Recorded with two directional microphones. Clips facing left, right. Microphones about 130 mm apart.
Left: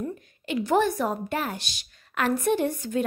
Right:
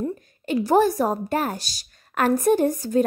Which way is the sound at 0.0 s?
40° right (ahead or behind).